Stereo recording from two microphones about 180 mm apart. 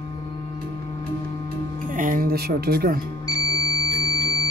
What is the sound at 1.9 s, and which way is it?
Speech, 50° right (ahead or behind).